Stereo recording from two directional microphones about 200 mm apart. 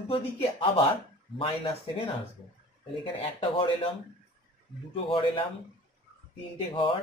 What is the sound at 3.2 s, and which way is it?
Speech, 25° left (ahead or behind).